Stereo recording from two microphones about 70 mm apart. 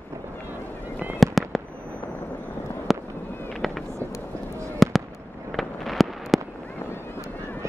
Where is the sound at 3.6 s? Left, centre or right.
Centre.